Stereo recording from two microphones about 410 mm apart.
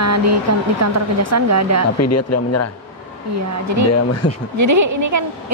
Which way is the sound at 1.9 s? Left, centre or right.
Left.